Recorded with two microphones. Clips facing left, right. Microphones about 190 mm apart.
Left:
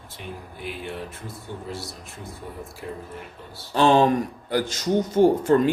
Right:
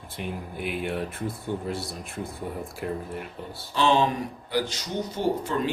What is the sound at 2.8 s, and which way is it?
Speech, 60° right (ahead or behind).